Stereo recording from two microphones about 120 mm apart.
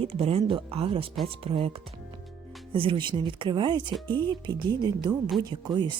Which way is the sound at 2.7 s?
45° right (ahead or behind).